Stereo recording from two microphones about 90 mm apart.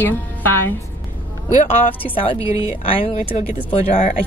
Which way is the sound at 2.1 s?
90° left.